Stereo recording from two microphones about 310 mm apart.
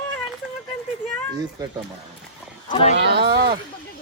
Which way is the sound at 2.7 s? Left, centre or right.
Centre.